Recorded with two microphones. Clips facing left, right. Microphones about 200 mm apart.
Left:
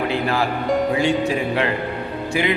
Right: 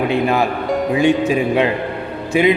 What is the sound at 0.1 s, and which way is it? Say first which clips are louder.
A man's voice: right 4 dB; 20° right (ahead or behind).